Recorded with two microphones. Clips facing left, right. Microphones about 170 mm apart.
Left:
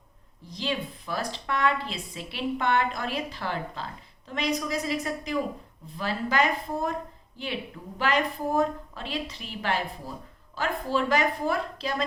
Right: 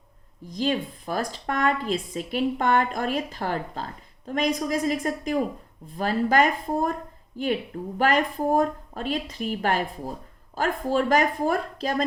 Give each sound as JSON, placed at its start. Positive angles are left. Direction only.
{"t": 0.4, "sound": "speech", "side_deg": -45}